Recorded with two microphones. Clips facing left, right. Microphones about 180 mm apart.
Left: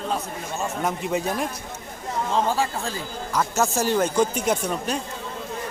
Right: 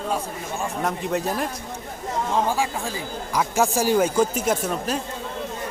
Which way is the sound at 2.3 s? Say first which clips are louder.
Even; 15° right (ahead or behind).